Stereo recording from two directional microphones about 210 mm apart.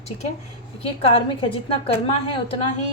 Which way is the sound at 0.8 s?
25° left (ahead or behind).